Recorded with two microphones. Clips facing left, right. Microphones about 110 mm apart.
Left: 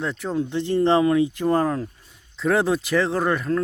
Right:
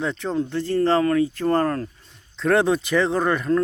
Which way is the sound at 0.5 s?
20° left (ahead or behind).